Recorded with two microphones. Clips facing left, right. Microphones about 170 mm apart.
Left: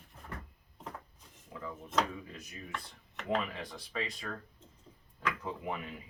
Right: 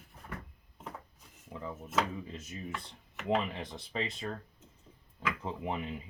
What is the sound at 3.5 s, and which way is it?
Speech, 25° right (ahead or behind).